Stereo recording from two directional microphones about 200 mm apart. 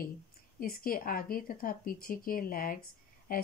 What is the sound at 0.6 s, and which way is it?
Speech, 45° left (ahead or behind).